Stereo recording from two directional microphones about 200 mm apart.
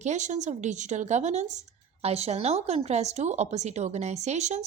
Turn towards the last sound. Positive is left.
turn(degrees=-35)  # may be behind; listen again after turning